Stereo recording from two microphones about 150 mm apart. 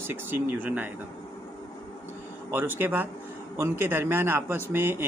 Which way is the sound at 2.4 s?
15° right (ahead or behind).